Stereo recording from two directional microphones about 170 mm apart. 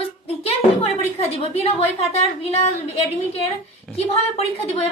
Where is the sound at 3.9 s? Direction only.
35° left (ahead or behind).